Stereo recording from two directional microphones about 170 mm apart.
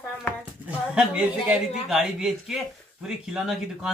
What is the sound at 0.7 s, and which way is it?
Speech, 5° right (ahead or behind).